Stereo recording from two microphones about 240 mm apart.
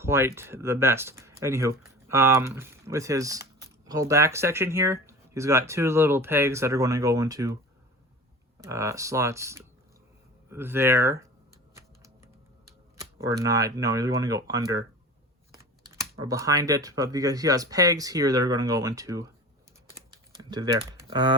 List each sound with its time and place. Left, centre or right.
0.0 s speech: centre
8.6 s speech: centre
11.7 s typing: centre
13.0 s shuffling cards: centre
13.4 s speech: centre
16.2 s speech: centre
20.5 s speech: centre